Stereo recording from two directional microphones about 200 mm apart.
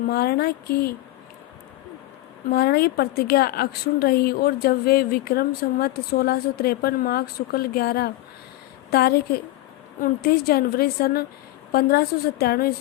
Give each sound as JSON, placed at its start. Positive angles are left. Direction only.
{"t": 0.1, "sound": "a woman's voice", "side_deg": 50}
{"t": 2.5, "sound": "a woman's voice", "side_deg": 50}